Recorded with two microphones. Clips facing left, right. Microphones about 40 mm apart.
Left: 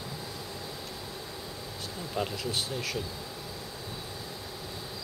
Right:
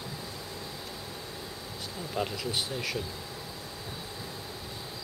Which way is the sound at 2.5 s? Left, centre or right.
Centre.